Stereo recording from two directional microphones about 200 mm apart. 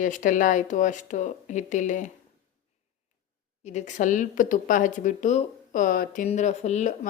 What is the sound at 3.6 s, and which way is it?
Speech, 35° left (ahead or behind).